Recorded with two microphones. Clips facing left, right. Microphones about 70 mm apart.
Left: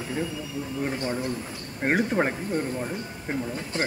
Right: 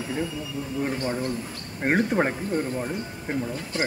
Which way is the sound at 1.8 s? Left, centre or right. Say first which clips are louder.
Right 1 dB; centre.